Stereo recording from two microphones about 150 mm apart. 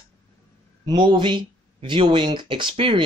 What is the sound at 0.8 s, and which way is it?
Speech, 30° right (ahead or behind).